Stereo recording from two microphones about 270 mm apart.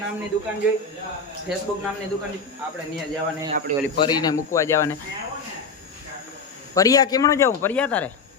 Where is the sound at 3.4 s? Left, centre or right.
Right.